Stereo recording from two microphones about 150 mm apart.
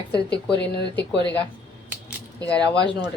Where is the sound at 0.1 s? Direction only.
10° left (ahead or behind).